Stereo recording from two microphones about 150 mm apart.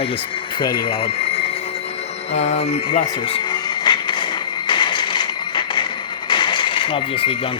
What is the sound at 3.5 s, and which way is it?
Music, 30° left (ahead or behind).